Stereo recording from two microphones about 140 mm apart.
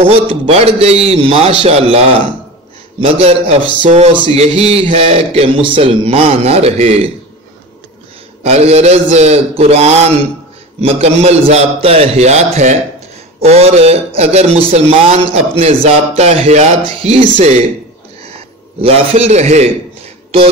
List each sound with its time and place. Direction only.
0.0 s a man's voice: 45° right (ahead or behind)
4.1 s a sound: 35° right (ahead or behind)
4.4 s a man's voice: 45° right (ahead or behind)
8.5 s a man's voice: 50° right (ahead or behind)